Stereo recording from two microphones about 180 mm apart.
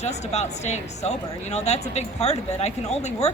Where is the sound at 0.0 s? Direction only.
40° left (ahead or behind).